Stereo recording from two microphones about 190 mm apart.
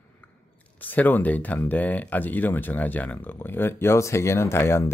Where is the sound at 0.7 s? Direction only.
10° left (ahead or behind).